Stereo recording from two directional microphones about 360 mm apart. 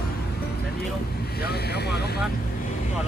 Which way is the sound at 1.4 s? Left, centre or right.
Left.